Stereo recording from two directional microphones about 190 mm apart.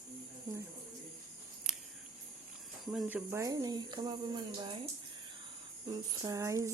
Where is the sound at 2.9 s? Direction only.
5° right (ahead or behind); by 4.7 s 25° right (ahead or behind).